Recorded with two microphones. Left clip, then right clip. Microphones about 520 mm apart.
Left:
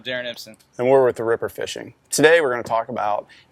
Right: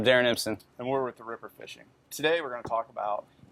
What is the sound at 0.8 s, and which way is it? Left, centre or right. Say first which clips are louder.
Speech: left 16 dB; left.